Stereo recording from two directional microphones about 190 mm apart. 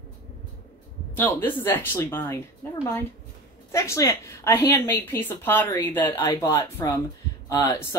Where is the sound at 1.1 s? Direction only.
10° left (ahead or behind).